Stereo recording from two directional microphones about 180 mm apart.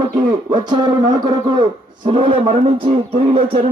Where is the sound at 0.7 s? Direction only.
25° right (ahead or behind).